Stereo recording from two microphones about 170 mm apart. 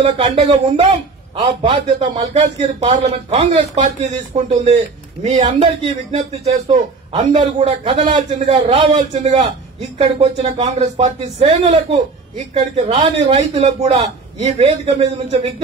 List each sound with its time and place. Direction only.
0.2 s a man's voice: 30° right (ahead or behind)
7.1 s a man's voice: 30° right (ahead or behind)
13.4 s a man's voice: 40° right (ahead or behind)